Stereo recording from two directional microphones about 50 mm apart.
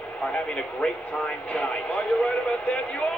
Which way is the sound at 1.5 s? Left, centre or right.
Left.